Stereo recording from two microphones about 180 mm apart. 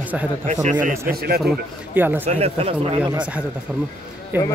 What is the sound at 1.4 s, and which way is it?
Speech, 5° right (ahead or behind).